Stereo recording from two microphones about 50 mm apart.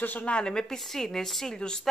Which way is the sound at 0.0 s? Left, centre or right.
Left.